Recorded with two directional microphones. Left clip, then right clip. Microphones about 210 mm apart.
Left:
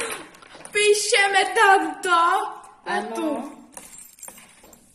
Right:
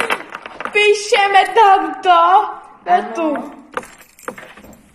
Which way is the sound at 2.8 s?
15° left (ahead or behind).